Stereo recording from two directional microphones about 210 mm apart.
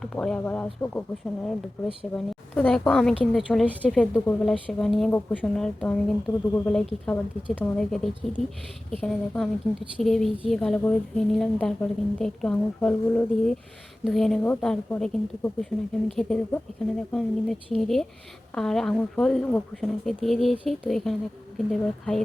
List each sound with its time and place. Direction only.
0.0 s speech: 5° left (ahead or behind)
2.1 s a woman's voice: 5° left (ahead or behind)